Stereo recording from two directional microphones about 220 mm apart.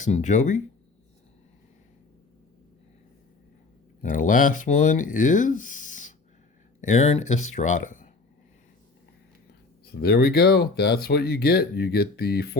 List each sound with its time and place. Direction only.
0.0 s speech: 30° left (ahead or behind)
4.0 s speech: 35° left (ahead or behind)
9.8 s speech: 45° left (ahead or behind)